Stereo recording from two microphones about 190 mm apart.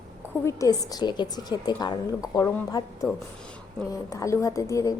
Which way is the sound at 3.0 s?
5° left (ahead or behind).